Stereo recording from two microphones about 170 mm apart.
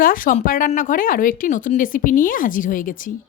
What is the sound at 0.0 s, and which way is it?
A woman's voice, 55° left (ahead or behind).